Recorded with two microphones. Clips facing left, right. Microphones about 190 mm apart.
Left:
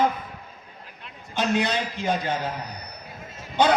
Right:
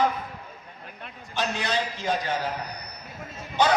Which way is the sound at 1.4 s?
55° left (ahead or behind).